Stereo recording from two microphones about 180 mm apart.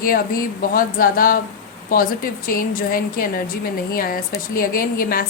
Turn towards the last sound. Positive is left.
turn(degrees=55)  # may be behind; listen again after turning